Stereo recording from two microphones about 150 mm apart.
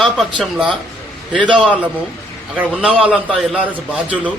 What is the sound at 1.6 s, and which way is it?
Speech, 10° right (ahead or behind).